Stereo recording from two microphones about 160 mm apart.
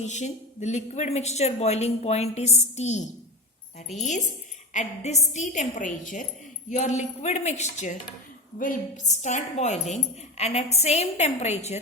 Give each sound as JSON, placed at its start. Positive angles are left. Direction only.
{"t": 0.0, "sound": "speech", "side_deg": 45}
{"t": 8.5, "sound": "speech", "side_deg": 60}